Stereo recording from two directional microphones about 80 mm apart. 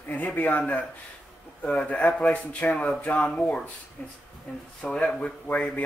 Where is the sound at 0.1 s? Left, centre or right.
Centre.